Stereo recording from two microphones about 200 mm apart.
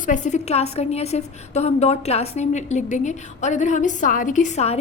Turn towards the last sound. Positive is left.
turn(degrees=35)  # may be behind; listen again after turning